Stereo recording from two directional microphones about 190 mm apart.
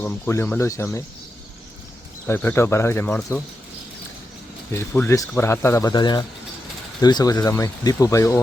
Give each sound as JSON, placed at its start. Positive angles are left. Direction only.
{"t": 0.0, "sound": "speech", "side_deg": 10}
{"t": 2.2, "sound": "speech", "side_deg": 10}
{"t": 4.7, "sound": "speech", "side_deg": 15}